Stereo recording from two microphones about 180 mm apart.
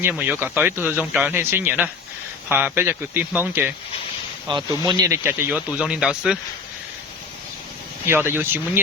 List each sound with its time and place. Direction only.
0.0 s speech: 10° right (ahead or behind)
4.5 s speech: 25° right (ahead or behind); by 6.4 s 5° right (ahead or behind)
8.0 s speech: 15° right (ahead or behind)